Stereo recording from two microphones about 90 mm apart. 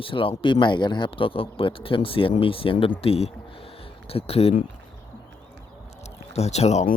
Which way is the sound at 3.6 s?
90° left.